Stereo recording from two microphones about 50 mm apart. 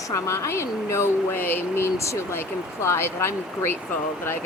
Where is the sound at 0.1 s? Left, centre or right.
Left.